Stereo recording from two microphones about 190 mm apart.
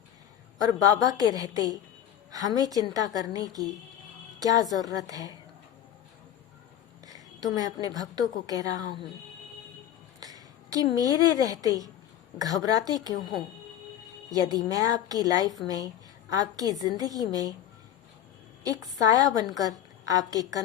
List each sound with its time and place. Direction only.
0.9 s a woman's voice: 20° right (ahead or behind)
7.1 s a woman's voice: 20° right (ahead or behind)
10.2 s a sound: 20° right (ahead or behind)
10.9 s a woman's voice: 20° right (ahead or behind)
14.3 s a woman's voice: 20° right (ahead or behind)
18.6 s a woman's voice: 20° right (ahead or behind)